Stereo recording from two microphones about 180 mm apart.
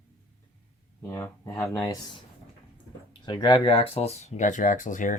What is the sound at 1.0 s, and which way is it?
Speech, 15° left (ahead or behind).